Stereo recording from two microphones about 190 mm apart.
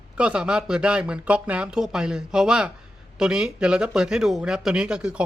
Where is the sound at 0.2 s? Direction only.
5° right (ahead or behind).